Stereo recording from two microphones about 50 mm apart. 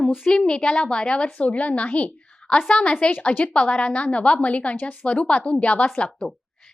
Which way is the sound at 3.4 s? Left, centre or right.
Centre.